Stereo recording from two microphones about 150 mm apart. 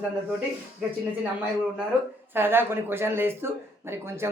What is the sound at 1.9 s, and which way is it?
Speech, 10° right (ahead or behind).